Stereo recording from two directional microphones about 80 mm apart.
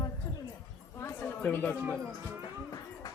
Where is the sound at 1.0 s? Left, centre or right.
Left.